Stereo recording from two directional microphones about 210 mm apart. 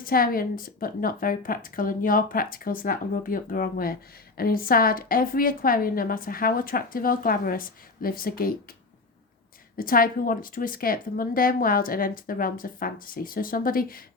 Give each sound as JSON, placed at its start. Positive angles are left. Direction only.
{"t": 0.0, "sound": "a woman's voice", "side_deg": 45}
{"t": 9.7, "sound": "a woman's voice", "side_deg": 45}